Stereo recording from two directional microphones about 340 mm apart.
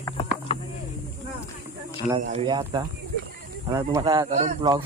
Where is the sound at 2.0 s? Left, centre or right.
Centre.